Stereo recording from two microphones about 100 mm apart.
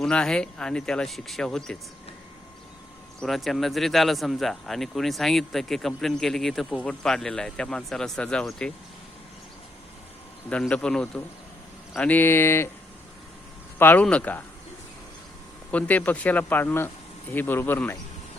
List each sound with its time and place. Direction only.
0.0 s speech: 10° left (ahead or behind)
3.2 s speech: centre (ahead or behind)
10.5 s speech: 10° left (ahead or behind)
13.7 s speech: 20° left (ahead or behind)
15.7 s speech: 15° left (ahead or behind)